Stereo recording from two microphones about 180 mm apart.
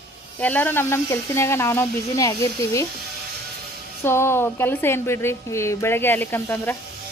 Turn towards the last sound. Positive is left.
turn(degrees=10)  # may be behind; listen again after turning